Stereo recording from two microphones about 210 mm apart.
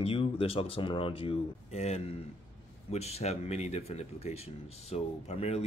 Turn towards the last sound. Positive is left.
turn(degrees=30)  # may be behind; listen again after turning